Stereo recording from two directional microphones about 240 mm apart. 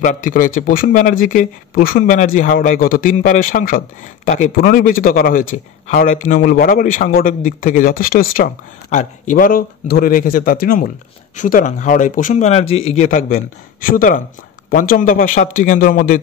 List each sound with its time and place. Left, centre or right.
0.0 s speech: left